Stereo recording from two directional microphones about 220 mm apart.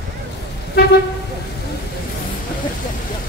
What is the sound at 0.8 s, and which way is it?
Speech, 45° left (ahead or behind).